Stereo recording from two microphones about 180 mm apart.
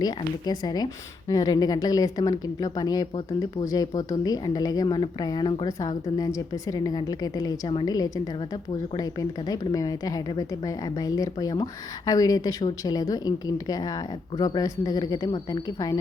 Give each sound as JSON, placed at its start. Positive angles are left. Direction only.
{"t": 0.0, "sound": "speech", "side_deg": 20}